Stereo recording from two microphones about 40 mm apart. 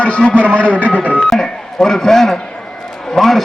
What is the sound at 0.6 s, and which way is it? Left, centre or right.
Speech, right.